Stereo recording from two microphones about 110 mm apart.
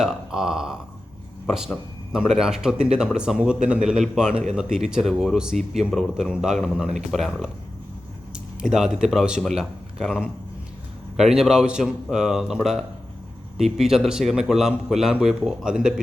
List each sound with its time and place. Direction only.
0.0 s a man's voice: 5° right (ahead or behind)
13.6 s a man's voice: 5° right (ahead or behind)